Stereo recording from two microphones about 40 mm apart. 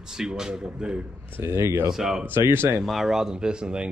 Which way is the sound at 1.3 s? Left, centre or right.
Right.